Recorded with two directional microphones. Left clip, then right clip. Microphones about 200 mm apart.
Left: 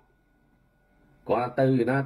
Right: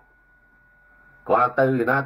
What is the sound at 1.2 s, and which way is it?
Speech, 20° right (ahead or behind).